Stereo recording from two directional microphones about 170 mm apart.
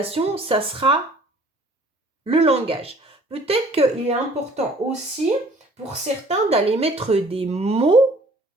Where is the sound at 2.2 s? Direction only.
35° right (ahead or behind).